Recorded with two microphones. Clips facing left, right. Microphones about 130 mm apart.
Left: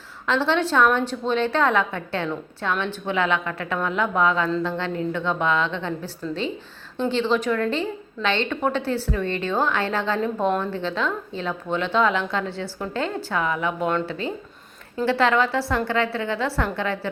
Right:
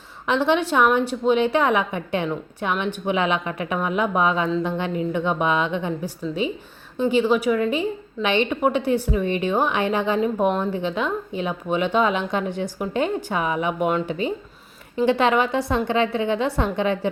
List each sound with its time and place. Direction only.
0.3 s a woman's voice: 15° right (ahead or behind)